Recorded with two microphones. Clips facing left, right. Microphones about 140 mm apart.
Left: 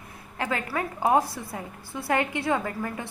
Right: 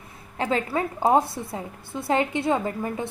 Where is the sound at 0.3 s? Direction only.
25° right (ahead or behind).